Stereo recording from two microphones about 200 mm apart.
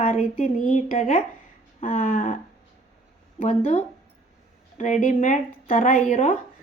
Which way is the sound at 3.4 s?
40° left (ahead or behind).